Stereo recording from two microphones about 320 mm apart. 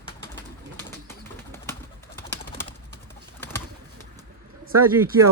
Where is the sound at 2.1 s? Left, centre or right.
Centre.